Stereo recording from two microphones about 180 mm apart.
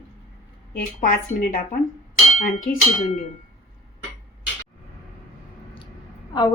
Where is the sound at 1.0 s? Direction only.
50° left (ahead or behind).